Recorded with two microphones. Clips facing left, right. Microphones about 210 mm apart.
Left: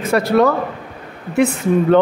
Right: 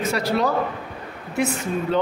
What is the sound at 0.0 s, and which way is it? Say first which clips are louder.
A man's voice: left 8 dB; 55° left (ahead or behind).